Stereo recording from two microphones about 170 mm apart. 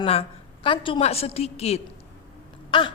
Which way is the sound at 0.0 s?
35° left (ahead or behind).